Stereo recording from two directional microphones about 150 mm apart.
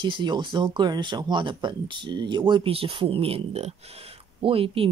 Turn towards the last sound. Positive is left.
turn(degrees=-40)  # may be behind; listen again after turning